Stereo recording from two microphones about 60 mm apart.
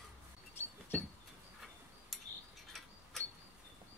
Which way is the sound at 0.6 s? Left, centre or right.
Left.